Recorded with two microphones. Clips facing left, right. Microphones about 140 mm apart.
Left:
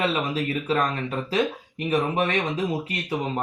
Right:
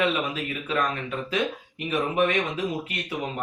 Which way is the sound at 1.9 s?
35° left (ahead or behind).